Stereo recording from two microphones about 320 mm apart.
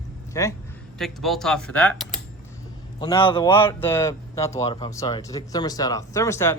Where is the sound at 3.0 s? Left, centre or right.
Centre.